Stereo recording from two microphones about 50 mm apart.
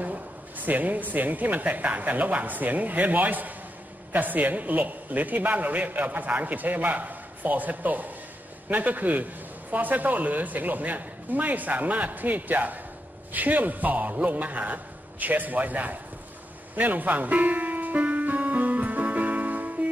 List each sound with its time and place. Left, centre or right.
0.0 s a man's voice: right
16.7 s music: right